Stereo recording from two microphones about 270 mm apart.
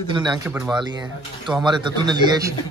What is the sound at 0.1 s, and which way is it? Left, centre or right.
Speech, centre.